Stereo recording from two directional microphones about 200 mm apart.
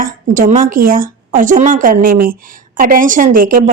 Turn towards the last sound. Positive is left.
turn(degrees=-45)  # may be behind; listen again after turning